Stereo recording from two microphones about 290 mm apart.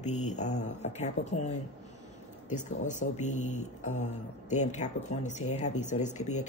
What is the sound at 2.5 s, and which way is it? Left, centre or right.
Speech, left.